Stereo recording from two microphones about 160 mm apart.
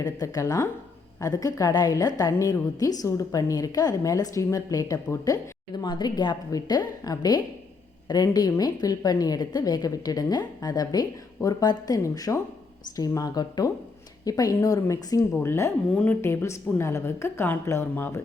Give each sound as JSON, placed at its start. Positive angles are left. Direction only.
{"t": 0.0, "sound": "a woman's voice", "side_deg": 20}